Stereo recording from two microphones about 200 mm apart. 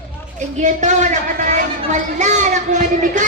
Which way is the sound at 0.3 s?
35° right (ahead or behind).